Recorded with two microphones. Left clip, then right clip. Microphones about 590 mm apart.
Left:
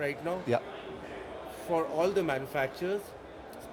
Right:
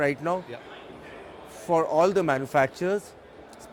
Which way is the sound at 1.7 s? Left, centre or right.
Right.